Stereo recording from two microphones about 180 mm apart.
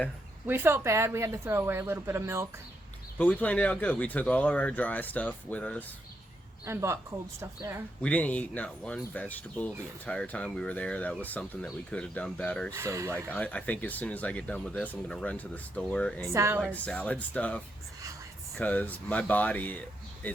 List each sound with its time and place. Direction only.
0.4 s a woman's voice: 10° right (ahead or behind)
3.2 s speech: 10° left (ahead or behind)
6.7 s a woman's voice: 15° right (ahead or behind)
8.0 s speech: 10° left (ahead or behind)
12.7 s a woman's voice: 15° right (ahead or behind)
13.1 s speech: 10° left (ahead or behind)
16.2 s a woman's voice: 15° right (ahead or behind)
16.7 s speech: 5° left (ahead or behind)